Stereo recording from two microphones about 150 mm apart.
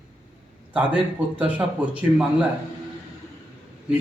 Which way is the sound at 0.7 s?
10° right (ahead or behind).